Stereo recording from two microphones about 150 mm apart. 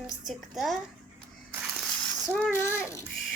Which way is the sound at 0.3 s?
Centre (ahead or behind).